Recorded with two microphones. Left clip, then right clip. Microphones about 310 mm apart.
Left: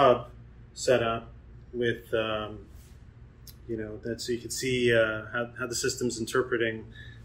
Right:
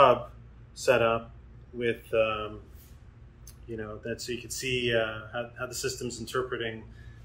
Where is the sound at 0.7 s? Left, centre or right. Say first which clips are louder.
Right 1 dB; centre.